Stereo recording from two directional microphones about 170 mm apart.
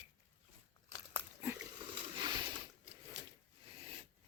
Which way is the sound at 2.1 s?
25° right (ahead or behind).